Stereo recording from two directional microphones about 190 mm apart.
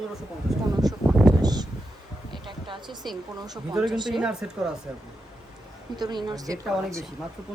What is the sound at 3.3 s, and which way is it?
Speech, 20° right (ahead or behind).